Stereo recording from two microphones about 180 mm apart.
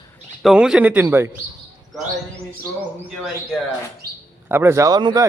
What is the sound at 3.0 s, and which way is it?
Speech, 10° left (ahead or behind).